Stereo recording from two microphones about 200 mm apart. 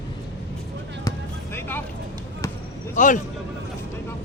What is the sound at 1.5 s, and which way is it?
Vehicle, 10° left (ahead or behind).